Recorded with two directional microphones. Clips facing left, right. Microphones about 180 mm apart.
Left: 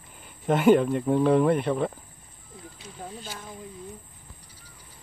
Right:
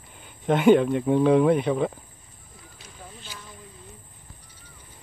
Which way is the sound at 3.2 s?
50° left (ahead or behind).